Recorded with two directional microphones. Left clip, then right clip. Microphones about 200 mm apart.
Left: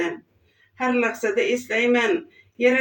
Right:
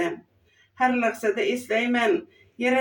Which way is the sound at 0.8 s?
15° right (ahead or behind).